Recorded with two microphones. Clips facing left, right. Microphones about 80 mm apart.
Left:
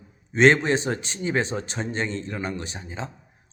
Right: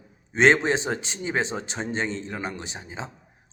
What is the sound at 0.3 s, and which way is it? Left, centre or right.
Speech, right.